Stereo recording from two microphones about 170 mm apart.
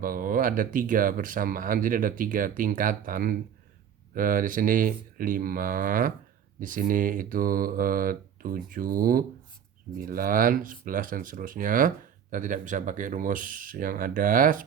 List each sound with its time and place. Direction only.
0.0 s speech: 55° right (ahead or behind)
6.6 s mantra: 55° right (ahead or behind)
10.0 s speech: 55° right (ahead or behind)